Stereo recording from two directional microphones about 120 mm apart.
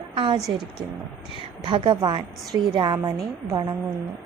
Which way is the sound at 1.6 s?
45° right (ahead or behind).